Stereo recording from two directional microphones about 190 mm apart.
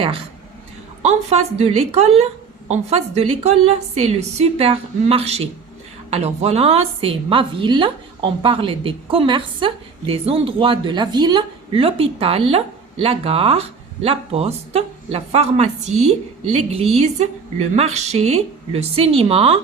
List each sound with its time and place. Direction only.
1.0 s a woman's voice: 35° right (ahead or behind)